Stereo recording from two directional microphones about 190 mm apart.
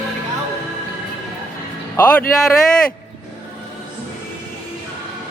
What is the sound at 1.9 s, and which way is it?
Speech, 10° left (ahead or behind).